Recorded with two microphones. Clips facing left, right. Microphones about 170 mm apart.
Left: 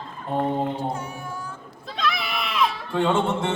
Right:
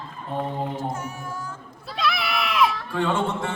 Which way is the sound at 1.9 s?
10° right (ahead or behind).